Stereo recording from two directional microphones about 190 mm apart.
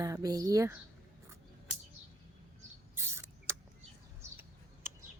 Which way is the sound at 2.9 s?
15° right (ahead or behind).